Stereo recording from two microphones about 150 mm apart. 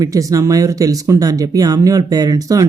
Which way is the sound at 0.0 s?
25° right (ahead or behind).